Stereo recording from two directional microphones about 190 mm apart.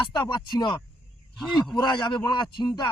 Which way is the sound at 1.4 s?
Centre (ahead or behind).